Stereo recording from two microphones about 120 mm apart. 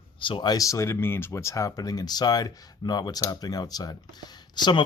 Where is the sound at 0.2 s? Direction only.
45° left (ahead or behind).